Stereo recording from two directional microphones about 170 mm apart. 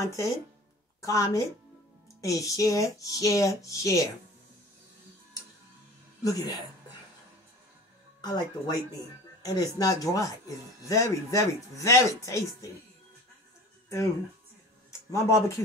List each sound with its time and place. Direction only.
0.0 s a woman's voice: 20° left (ahead or behind)
6.2 s speech: 20° left (ahead or behind)
8.2 s speech: 25° left (ahead or behind)
14.9 s speech: 15° left (ahead or behind)